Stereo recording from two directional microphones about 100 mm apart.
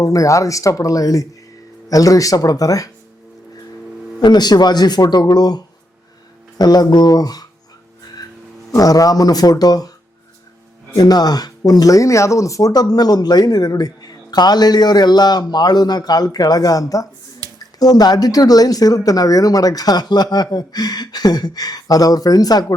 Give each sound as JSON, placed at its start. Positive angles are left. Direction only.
{"t": 0.0, "sound": "speech", "side_deg": 35}
{"t": 4.2, "sound": "speech", "side_deg": 45}
{"t": 8.7, "sound": "speech", "side_deg": 35}
{"t": 10.9, "sound": "speech", "side_deg": 40}
{"t": 17.4, "sound": "squish", "side_deg": -40}
{"t": 17.7, "sound": "speech", "side_deg": 40}